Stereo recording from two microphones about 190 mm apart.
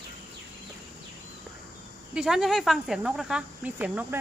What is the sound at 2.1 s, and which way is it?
Speech, 5° right (ahead or behind).